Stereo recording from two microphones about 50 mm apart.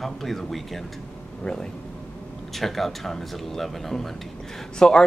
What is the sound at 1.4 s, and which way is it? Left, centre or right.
Speech, centre.